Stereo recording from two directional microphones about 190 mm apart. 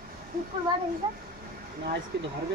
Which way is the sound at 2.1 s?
70° right (ahead or behind).